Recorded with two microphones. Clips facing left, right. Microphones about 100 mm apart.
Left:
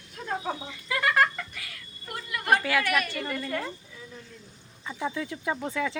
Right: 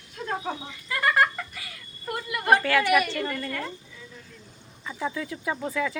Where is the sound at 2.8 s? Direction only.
10° right (ahead or behind).